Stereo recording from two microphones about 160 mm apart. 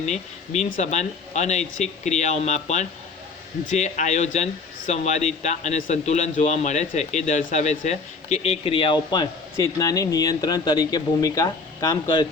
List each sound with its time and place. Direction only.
0.0 s a man's voice: 45° left (ahead or behind); by 12.2 s 25° left (ahead or behind)